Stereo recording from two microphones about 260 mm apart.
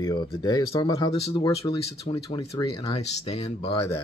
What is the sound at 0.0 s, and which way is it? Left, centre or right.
Speech, centre.